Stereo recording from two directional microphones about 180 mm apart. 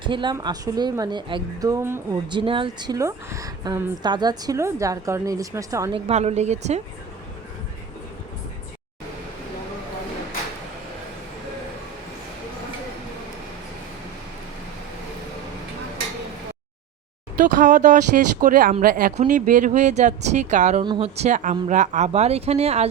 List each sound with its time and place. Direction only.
0.0 s speech: 25° right (ahead or behind)
2.2 s a woman's voice: 25° right (ahead or behind)
5.9 s speech: 35° right (ahead or behind)
17.4 s speech: 45° right (ahead or behind)
20.8 s speech: 25° right (ahead or behind)
21.2 s speech: 45° right (ahead or behind)